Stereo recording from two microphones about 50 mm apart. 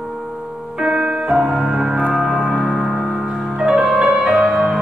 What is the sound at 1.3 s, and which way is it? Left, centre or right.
Music, centre.